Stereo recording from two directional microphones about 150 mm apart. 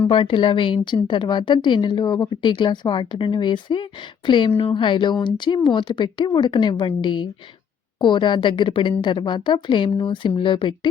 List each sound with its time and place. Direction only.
0.1 s a woman's voice: 35° left (ahead or behind)